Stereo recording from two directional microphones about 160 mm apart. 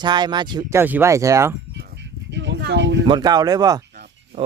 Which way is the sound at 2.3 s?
90° right.